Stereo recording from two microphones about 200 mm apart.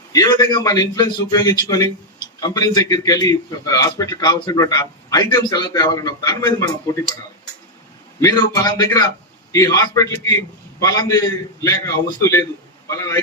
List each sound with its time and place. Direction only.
0.1 s a man's voice: 15° left (ahead or behind)
8.2 s a man's voice: 15° left (ahead or behind)
12.2 s a man's voice: 15° left (ahead or behind)